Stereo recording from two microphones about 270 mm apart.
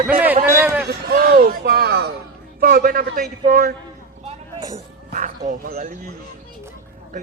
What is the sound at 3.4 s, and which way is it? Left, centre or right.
Music, right.